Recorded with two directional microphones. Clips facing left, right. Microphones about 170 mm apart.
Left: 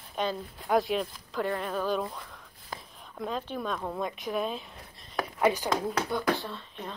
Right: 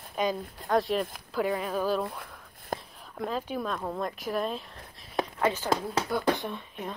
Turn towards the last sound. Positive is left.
turn(degrees=-10)  # may be behind; listen again after turning